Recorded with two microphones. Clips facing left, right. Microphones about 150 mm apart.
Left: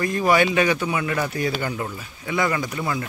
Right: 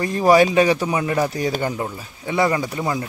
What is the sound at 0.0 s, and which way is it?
A man's voice, 30° right (ahead or behind).